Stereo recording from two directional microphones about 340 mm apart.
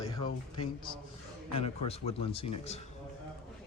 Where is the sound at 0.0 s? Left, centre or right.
Centre.